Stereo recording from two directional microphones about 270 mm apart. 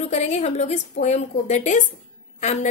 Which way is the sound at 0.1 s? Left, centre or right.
Left.